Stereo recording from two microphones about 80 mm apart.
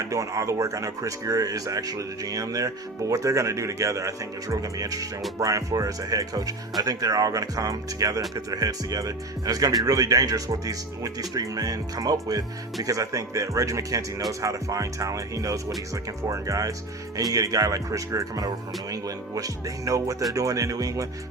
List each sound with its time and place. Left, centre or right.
0.0 s speech: right